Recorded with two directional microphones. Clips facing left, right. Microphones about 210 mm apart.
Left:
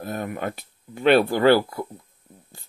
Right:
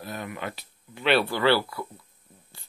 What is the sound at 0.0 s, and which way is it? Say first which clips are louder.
Speech: left 6 dB; 45° left (ahead or behind).